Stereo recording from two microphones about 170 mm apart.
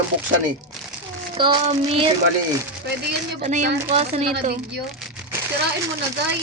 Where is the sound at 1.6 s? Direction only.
35° right (ahead or behind).